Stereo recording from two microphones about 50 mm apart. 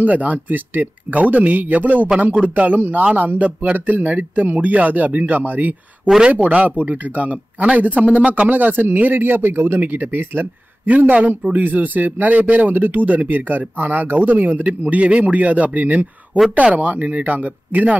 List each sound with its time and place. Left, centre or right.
0.0 s speech: right